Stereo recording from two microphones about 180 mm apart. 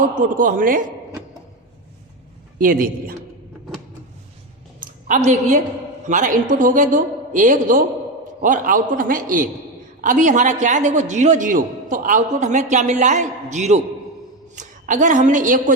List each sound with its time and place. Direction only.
0.3 s a man's voice: 50° right (ahead or behind)
2.6 s a man's voice: 50° right (ahead or behind)
4.8 s a woman's voice: 45° right (ahead or behind)